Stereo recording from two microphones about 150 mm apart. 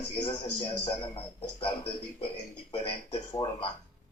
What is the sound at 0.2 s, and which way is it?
A man's voice, 45° left (ahead or behind).